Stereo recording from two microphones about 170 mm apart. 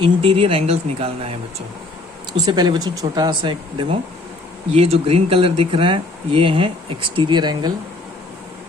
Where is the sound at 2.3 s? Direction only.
25° right (ahead or behind).